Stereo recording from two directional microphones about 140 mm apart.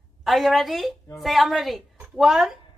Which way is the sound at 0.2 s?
Centre (ahead or behind).